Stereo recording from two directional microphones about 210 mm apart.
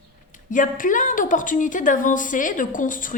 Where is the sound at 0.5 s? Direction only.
40° left (ahead or behind).